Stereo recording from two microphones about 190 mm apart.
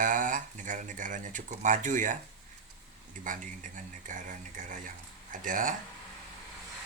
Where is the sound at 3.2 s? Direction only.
45° right (ahead or behind).